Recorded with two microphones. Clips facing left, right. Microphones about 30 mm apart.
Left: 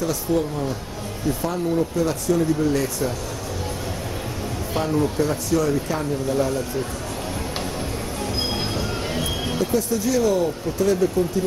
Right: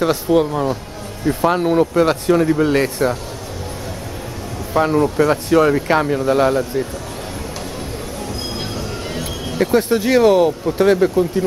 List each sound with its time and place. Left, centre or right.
0.0 s speech: right
4.8 s speech: right
9.6 s speech: right